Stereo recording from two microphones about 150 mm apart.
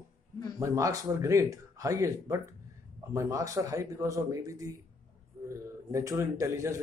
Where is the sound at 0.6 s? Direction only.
20° right (ahead or behind).